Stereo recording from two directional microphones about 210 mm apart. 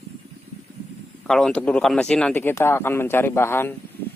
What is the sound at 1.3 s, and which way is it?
Speech, centre (ahead or behind).